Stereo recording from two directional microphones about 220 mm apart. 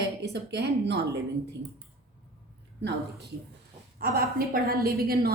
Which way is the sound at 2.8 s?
50° right (ahead or behind).